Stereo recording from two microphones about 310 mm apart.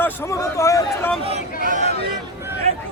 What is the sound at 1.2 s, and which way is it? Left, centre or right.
Speech, right.